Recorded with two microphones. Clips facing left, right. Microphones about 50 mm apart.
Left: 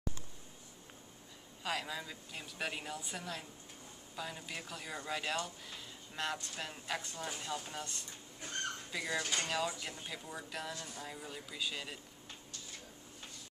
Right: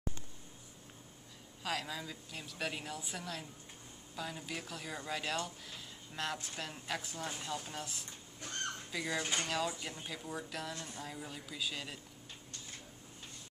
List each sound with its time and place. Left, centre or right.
1.6 s speech: centre